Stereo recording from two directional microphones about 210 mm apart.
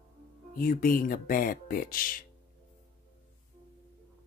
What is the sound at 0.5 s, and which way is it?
Speech, 40° left (ahead or behind).